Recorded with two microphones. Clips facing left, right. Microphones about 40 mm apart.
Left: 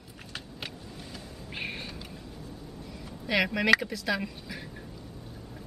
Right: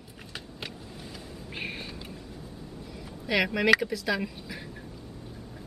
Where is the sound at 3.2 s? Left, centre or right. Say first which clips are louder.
Right 1 dB; centre.